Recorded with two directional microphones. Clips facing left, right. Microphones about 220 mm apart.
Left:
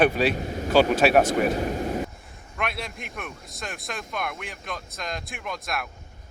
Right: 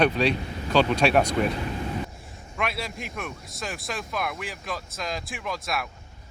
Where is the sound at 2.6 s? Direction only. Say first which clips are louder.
Right 1 dB; centre (ahead or behind).